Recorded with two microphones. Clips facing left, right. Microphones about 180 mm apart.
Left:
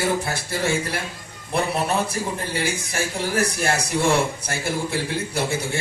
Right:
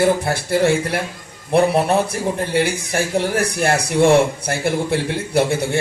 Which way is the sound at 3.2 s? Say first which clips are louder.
Right 4 dB; 60° right (ahead or behind).